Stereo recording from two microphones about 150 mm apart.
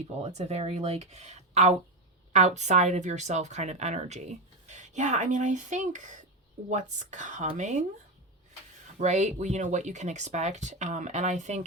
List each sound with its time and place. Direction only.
0.2 s speech: 50° right (ahead or behind)
9.0 s speech: 50° right (ahead or behind)